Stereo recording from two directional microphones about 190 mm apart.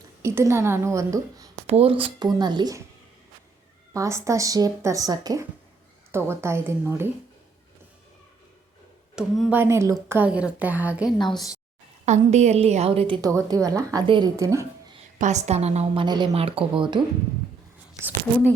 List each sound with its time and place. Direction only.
0.2 s speech: 15° right (ahead or behind)
1.6 s speech: 30° right (ahead or behind)
3.9 s speech: 15° right (ahead or behind)
9.1 s speech: 5° right (ahead or behind)
12.0 s a woman's voice: 35° right (ahead or behind)
13.3 s speech: 20° right (ahead or behind)
15.2 s a woman's voice: 40° right (ahead or behind)